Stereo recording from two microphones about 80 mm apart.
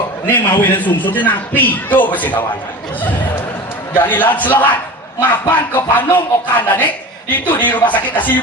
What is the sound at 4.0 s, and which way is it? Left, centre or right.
A man's voice, left.